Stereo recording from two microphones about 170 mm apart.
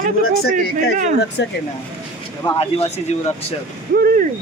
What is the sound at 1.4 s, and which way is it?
Speech, 90° left.